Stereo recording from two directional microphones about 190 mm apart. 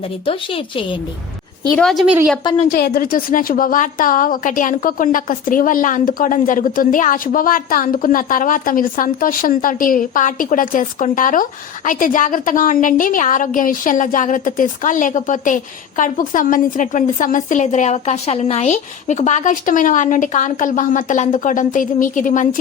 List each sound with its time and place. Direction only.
0.3 s speech: 30° left (ahead or behind)
1.7 s a woman's voice: centre (ahead or behind)
2.7 s a woman's voice: 50° left (ahead or behind)